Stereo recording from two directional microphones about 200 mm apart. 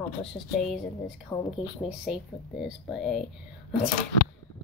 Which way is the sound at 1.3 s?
10° left (ahead or behind).